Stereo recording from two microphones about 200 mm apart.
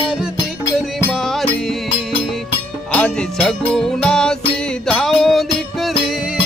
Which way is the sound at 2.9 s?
5° left (ahead or behind).